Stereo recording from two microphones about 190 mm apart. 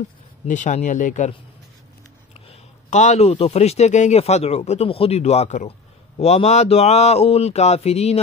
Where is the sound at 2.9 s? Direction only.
40° left (ahead or behind).